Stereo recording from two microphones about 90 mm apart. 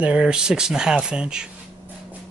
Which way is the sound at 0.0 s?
10° right (ahead or behind).